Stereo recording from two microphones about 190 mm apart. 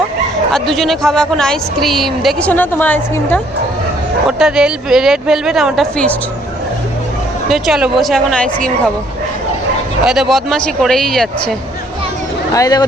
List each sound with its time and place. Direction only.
0.5 s a woman's voice: centre (ahead or behind)
4.3 s a woman's voice: 5° right (ahead or behind)
7.4 s a woman's voice: centre (ahead or behind)
10.0 s a woman's voice: 5° right (ahead or behind)
12.5 s speech: 20° left (ahead or behind)